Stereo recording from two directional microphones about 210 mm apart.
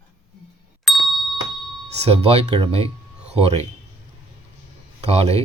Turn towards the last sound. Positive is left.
turn(degrees=-30)  # may be behind; listen again after turning